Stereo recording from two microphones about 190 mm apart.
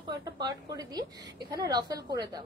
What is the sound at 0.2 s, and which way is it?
A woman's voice, 20° right (ahead or behind).